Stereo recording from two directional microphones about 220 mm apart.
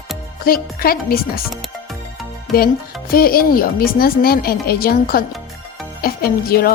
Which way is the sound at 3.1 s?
40° left (ahead or behind).